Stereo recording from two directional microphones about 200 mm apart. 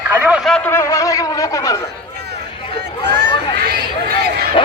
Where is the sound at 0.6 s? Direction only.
15° left (ahead or behind).